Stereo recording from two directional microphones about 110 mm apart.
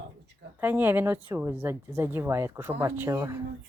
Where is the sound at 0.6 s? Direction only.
15° right (ahead or behind).